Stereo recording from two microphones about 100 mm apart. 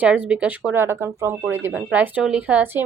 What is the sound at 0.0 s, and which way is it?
Speech, 15° right (ahead or behind).